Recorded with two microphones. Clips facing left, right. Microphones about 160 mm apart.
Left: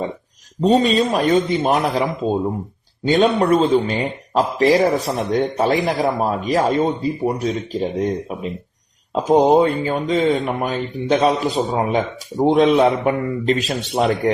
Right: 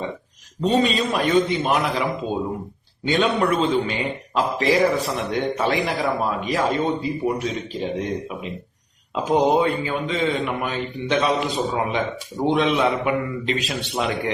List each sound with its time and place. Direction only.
0.6 s a man's voice: 40° left (ahead or behind)
9.1 s a man's voice: 40° left (ahead or behind)